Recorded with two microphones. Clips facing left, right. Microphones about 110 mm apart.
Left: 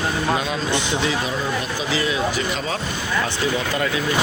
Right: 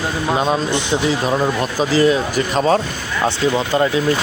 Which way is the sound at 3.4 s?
30° right (ahead or behind).